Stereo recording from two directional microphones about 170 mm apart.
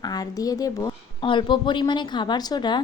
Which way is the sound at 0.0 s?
20° left (ahead or behind).